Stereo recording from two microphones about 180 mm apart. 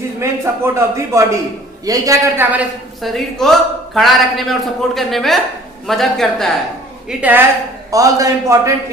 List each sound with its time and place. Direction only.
0.2 s a woman's voice: 15° right (ahead or behind)
7.9 s a man's voice: 20° right (ahead or behind)